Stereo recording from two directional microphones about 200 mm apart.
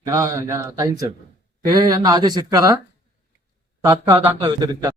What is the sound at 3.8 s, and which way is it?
Speech, 15° right (ahead or behind).